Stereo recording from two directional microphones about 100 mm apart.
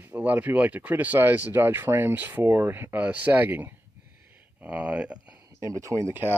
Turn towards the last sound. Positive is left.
turn(degrees=-20)  # may be behind; listen again after turning